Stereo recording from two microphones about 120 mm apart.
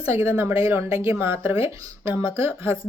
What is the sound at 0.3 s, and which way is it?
A woman's voice, 15° right (ahead or behind).